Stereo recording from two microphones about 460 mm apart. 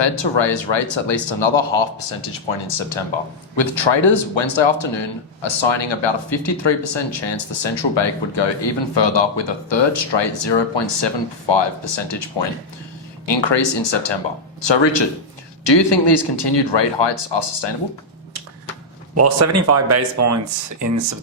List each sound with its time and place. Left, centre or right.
0.0 s speech: left
19.1 s speech: right